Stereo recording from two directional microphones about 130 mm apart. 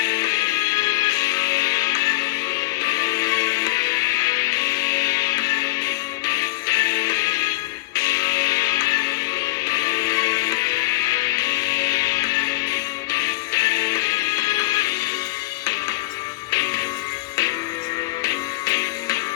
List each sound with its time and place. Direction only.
0.0 s music: 25° left (ahead or behind)
16.5 s music: 25° left (ahead or behind)
18.2 s music: 25° left (ahead or behind)